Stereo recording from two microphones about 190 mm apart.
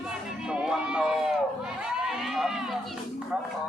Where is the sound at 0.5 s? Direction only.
5° right (ahead or behind).